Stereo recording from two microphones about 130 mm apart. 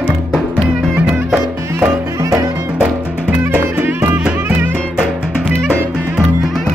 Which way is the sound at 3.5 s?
10° right (ahead or behind).